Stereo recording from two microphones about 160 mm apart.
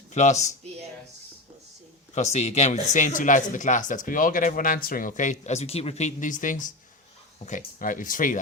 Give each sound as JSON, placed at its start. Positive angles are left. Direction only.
{"t": 0.1, "sound": "speech", "side_deg": 45}
{"t": 2.1, "sound": "speech", "side_deg": 45}